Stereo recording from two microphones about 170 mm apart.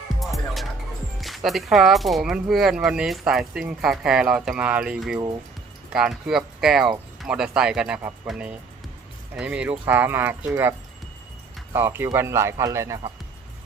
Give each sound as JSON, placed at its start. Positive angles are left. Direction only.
{"t": 0.2, "sound": "music", "side_deg": 0}
{"t": 1.2, "sound": "speech", "side_deg": 0}